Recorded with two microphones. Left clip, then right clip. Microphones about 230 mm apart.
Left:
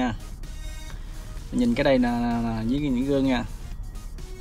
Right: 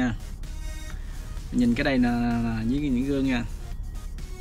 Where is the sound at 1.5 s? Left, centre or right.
Centre.